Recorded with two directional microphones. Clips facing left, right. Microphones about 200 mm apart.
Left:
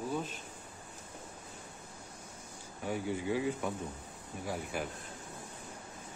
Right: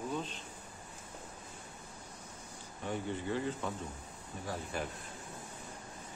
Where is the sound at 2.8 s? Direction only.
10° left (ahead or behind).